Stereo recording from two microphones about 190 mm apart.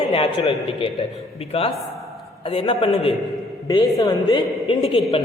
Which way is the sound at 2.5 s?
30° left (ahead or behind).